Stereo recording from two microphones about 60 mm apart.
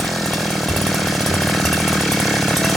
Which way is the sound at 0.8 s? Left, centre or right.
Centre.